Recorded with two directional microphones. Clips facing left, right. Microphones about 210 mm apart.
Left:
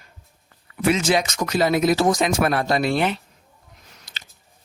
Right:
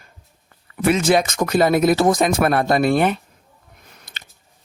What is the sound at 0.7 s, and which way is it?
Speech, 55° right (ahead or behind).